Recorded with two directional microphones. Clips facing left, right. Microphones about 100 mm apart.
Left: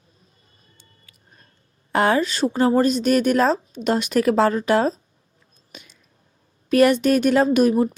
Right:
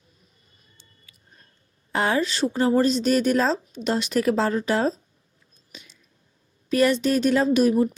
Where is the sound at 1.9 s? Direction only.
55° left (ahead or behind).